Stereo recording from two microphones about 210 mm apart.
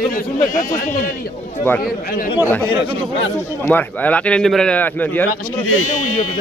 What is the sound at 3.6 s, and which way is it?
A man's voice, 10° left (ahead or behind).